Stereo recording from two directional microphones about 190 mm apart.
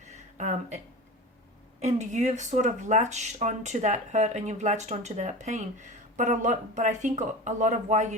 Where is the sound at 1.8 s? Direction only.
35° right (ahead or behind).